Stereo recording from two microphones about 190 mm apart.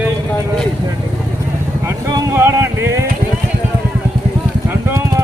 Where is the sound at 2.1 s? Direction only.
15° right (ahead or behind).